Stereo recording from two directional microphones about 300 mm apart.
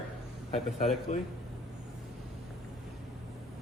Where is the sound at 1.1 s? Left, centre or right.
Left.